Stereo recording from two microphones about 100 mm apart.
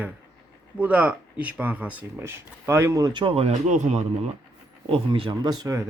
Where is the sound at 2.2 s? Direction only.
25° right (ahead or behind).